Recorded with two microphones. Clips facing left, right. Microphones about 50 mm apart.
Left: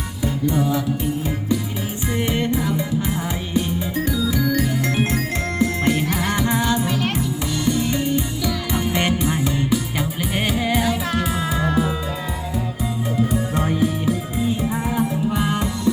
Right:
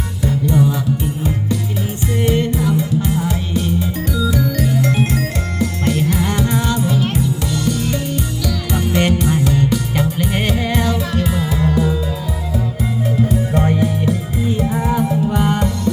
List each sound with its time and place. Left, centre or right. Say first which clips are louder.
2.1 s music: right 4 dB; centre
13.6 s music: right 6 dB; centre
13.8 s music: right 2 dB; centre